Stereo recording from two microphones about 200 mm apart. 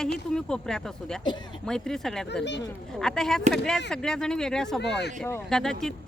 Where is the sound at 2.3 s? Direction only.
60° left (ahead or behind).